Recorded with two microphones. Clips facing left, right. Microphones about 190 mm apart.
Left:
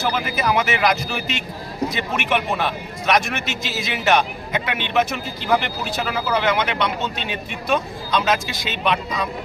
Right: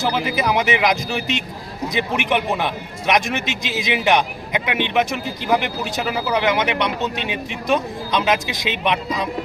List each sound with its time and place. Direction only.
0.0 s a man's voice: 20° right (ahead or behind)